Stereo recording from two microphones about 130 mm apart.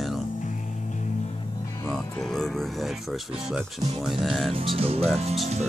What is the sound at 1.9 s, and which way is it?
Speech, 5° left (ahead or behind).